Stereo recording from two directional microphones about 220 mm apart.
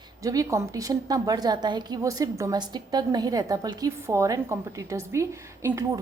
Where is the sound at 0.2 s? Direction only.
15° right (ahead or behind).